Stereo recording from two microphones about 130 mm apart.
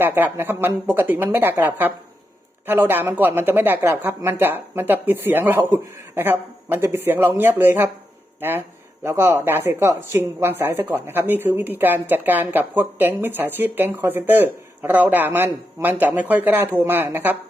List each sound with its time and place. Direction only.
0.0 s speech: 15° right (ahead or behind)